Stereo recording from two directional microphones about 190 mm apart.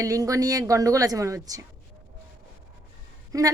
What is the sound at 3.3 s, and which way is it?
Speech, 20° right (ahead or behind).